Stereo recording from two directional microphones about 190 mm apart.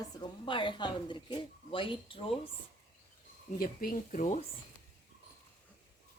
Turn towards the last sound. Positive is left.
turn(degrees=40)  # may be behind; listen again after turning